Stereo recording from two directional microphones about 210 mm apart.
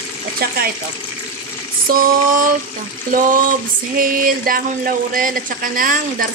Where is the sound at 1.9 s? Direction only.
40° right (ahead or behind).